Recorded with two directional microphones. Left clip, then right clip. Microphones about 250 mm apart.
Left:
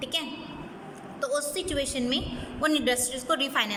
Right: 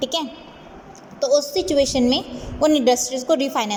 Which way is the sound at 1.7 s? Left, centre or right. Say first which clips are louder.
Right 12 dB; centre.